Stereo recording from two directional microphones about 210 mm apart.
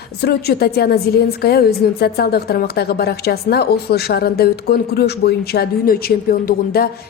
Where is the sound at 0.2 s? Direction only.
50° left (ahead or behind).